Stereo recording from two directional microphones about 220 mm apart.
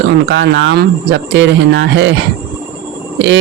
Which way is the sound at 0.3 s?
55° right (ahead or behind).